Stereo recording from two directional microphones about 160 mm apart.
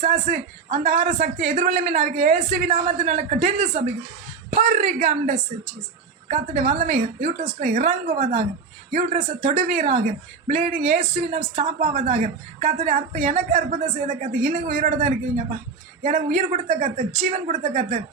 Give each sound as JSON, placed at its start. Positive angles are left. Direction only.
{"t": 0.0, "sound": "a man's voice", "side_deg": -50}
{"t": 11.9, "sound": "a woman's voice", "side_deg": -60}
{"t": 16.0, "sound": "a woman's voice", "side_deg": -50}
{"t": 17.2, "sound": "a man's voice", "side_deg": -45}